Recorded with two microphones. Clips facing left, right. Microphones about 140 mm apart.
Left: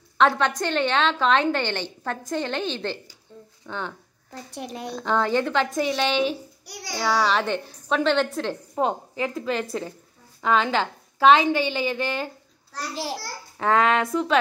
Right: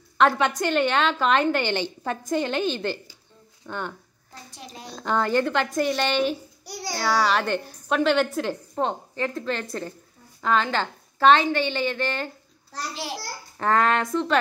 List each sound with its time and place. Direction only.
0.2 s a woman's voice: 5° right (ahead or behind)
4.3 s a child's voice: 60° left (ahead or behind)
4.9 s a woman's voice: 5° right (ahead or behind)
6.6 s a sound: 30° right (ahead or behind)
7.0 s a woman's voice: 5° right (ahead or behind)
8.7 s a woman's voice: 5° left (ahead or behind)
13.6 s a woman's voice: centre (ahead or behind)